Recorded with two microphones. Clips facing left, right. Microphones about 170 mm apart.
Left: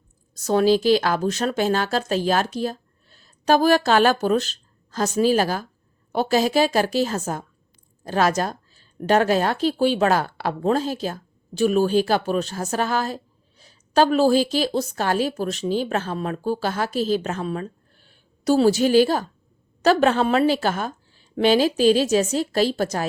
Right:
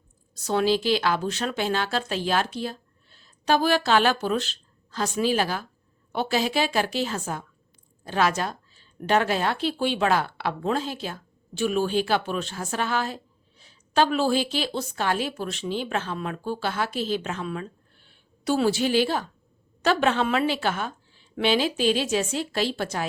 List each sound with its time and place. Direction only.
0.4 s a woman's voice: 45° left (ahead or behind)